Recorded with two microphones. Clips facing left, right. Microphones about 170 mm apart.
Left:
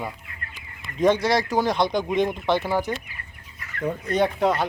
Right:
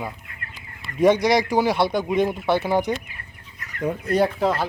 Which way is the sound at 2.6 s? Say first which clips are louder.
Right 3 dB; 15° right (ahead or behind).